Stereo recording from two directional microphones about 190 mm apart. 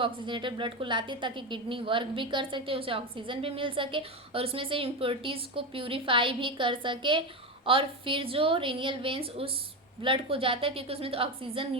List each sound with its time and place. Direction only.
0.0 s a woman's voice: 25° right (ahead or behind)